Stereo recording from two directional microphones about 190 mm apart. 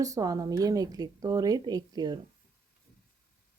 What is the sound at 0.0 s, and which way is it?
Speech, 20° right (ahead or behind).